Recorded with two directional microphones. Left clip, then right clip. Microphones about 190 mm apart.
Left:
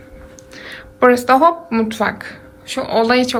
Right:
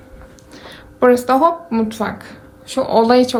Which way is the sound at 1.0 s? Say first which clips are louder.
Left 1 dB; 15° right (ahead or behind).